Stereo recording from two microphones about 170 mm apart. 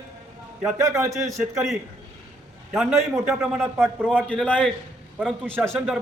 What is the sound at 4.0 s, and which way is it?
A man's voice, 5° left (ahead or behind).